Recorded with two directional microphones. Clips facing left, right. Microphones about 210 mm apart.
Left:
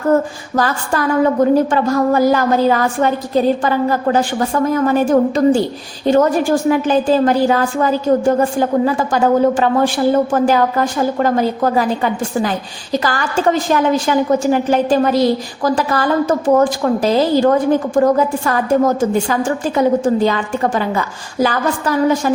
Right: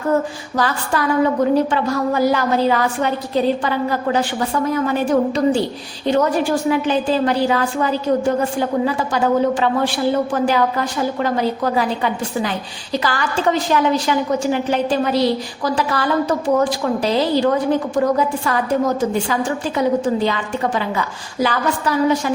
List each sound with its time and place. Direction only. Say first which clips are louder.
0.5 s a woman's voice: left 3 dB; 45° left (ahead or behind)